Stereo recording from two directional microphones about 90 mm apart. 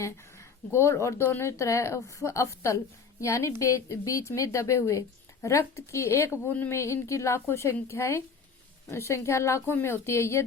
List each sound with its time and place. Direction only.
0.0 s a woman's voice: 35° left (ahead or behind)